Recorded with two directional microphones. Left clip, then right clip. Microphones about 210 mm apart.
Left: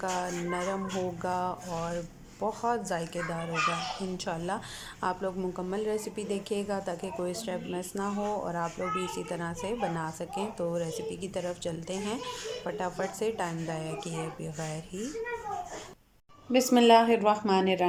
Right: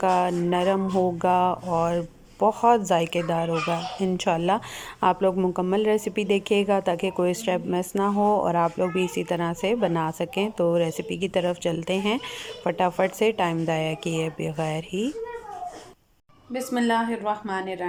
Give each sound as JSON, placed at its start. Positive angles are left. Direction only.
{"t": 0.0, "sound": "a woman's voice", "side_deg": -20}
{"t": 16.5, "sound": "a woman's voice", "side_deg": 5}